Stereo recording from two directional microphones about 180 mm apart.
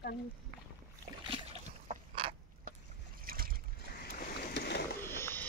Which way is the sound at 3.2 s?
55° right (ahead or behind).